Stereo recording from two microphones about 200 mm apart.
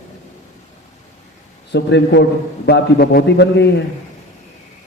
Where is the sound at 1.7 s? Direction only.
60° left (ahead or behind).